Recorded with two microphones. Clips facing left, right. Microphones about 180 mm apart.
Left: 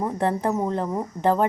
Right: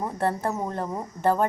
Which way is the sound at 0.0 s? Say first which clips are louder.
Left 3 dB; 20° left (ahead or behind).